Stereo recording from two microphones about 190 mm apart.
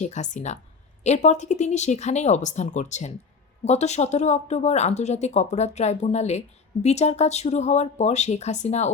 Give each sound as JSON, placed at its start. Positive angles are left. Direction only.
{"t": 0.0, "sound": "speech", "side_deg": 40}